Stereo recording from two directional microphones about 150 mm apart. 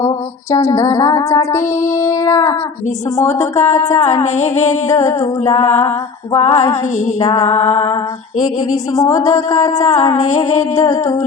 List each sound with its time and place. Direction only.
0.5 s music: 20° left (ahead or behind)
3.3 s female singing: 45° left (ahead or behind)
9.0 s music: 20° left (ahead or behind)
9.7 s female singing: 45° left (ahead or behind)
10.8 s music: 20° left (ahead or behind)